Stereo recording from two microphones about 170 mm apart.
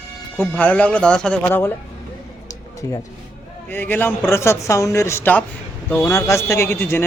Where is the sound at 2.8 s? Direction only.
20° left (ahead or behind).